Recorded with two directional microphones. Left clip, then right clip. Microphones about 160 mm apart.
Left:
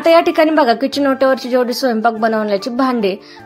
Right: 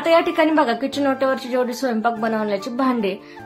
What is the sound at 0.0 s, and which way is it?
A woman's voice, 40° left (ahead or behind).